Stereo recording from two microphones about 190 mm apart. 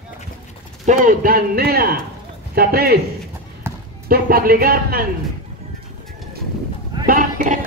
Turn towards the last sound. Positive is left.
turn(degrees=-45)  # may be behind; listen again after turning